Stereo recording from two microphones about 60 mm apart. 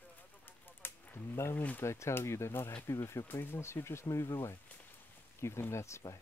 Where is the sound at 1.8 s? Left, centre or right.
Left.